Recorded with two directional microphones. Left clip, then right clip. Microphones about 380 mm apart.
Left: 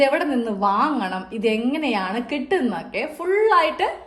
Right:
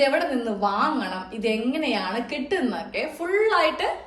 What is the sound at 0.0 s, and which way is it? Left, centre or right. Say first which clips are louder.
A woman's voice: left 2 dB; centre.